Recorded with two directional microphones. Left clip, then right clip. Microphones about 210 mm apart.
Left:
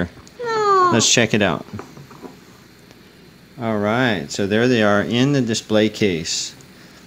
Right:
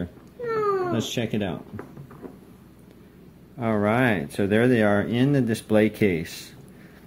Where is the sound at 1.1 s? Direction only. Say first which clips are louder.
Left 12 dB; 30° left (ahead or behind).